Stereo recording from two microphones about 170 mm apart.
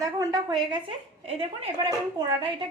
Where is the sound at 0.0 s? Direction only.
20° right (ahead or behind).